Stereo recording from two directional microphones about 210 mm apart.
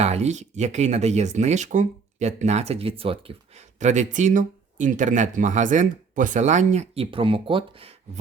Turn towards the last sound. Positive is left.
turn(degrees=-25)  # may be behind; listen again after turning